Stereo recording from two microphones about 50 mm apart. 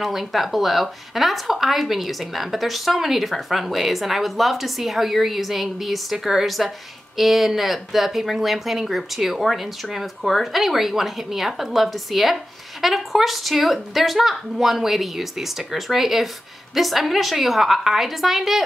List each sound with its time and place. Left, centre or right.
0.0 s speech: centre